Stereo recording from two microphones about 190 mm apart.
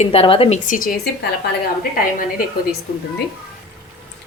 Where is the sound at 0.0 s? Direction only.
30° left (ahead or behind).